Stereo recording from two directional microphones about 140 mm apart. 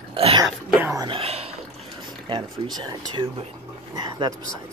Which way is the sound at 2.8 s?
30° right (ahead or behind).